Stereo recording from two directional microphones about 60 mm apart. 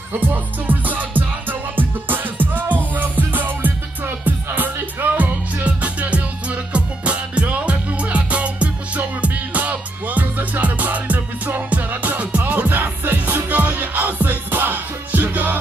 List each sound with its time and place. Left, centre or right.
0.3 s music: right